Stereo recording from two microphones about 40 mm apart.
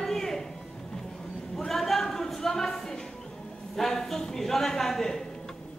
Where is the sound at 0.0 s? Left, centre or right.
Centre.